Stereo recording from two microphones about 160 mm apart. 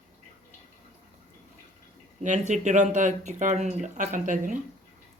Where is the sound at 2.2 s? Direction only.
50° right (ahead or behind).